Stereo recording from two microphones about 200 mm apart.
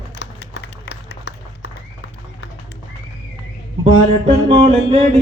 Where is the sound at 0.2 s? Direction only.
60° left (ahead or behind).